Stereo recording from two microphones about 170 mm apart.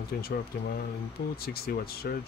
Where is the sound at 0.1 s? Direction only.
60° left (ahead or behind).